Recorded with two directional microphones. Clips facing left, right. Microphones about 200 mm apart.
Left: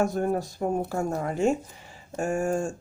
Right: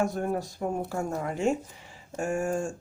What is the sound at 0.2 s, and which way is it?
Speech, 40° left (ahead or behind).